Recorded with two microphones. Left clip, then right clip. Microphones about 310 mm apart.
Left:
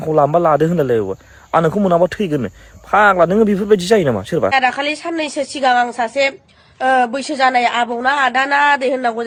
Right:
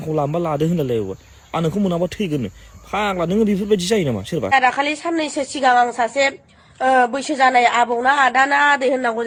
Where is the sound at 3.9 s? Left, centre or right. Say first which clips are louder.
Left 6 dB; centre.